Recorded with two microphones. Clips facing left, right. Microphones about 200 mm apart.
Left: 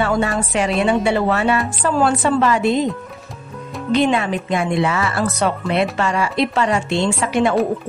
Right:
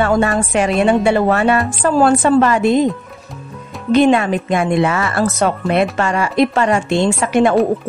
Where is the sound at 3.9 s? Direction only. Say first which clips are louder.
Right 5 dB; 50° right (ahead or behind).